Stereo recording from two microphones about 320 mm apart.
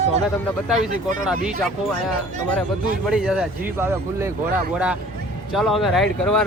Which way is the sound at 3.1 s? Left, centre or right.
Centre.